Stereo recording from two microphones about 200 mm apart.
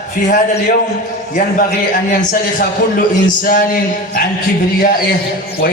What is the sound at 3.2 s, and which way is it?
Speech, 45° left (ahead or behind).